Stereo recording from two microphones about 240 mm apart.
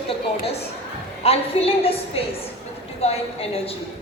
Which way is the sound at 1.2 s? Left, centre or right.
Left.